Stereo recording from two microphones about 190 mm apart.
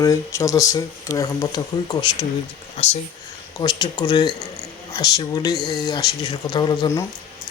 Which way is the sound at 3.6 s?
20° left (ahead or behind).